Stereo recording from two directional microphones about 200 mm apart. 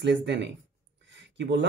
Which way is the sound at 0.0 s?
60° right (ahead or behind).